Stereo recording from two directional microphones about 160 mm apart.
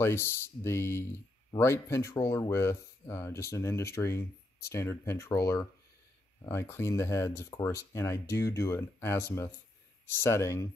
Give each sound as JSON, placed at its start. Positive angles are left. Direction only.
{"t": 0.0, "sound": "speech", "side_deg": 15}